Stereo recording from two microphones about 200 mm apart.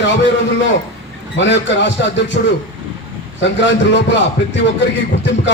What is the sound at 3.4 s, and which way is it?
Speech, 65° left (ahead or behind).